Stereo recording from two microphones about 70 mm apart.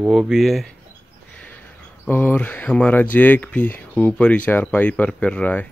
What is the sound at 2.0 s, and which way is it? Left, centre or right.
Speech, left.